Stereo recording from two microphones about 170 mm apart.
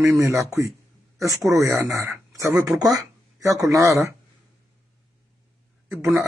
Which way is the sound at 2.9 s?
20° right (ahead or behind).